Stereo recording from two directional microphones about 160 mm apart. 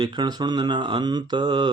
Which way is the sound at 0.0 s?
25° right (ahead or behind).